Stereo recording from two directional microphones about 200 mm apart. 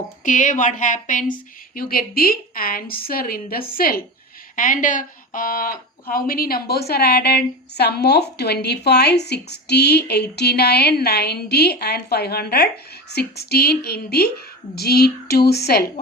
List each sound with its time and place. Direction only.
0.3 s speech: 40° left (ahead or behind)